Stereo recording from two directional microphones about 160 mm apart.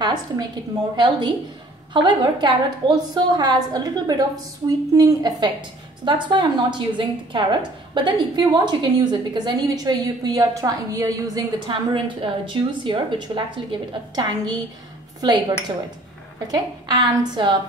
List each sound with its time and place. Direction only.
0.0 s a woman's voice: 25° right (ahead or behind)